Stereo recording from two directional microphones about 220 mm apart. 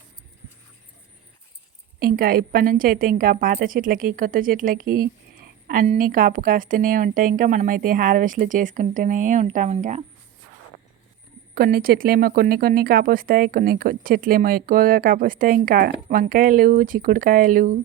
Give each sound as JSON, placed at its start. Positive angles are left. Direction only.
{"t": 2.0, "sound": "speech", "side_deg": -40}
{"t": 11.5, "sound": "speech", "side_deg": -45}